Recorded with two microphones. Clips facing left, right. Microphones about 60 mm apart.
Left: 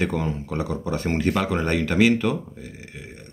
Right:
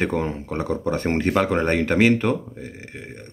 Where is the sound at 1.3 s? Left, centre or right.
Right.